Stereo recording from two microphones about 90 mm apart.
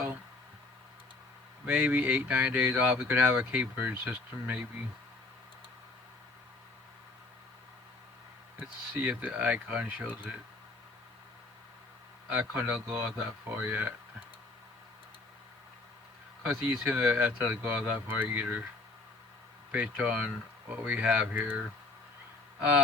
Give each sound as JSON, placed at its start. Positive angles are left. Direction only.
{"t": 1.6, "sound": "speech", "side_deg": -15}
{"t": 9.0, "sound": "speech", "side_deg": -15}
{"t": 12.3, "sound": "speech", "side_deg": -20}
{"t": 16.4, "sound": "speech", "side_deg": -15}
{"t": 19.7, "sound": "speech", "side_deg": -15}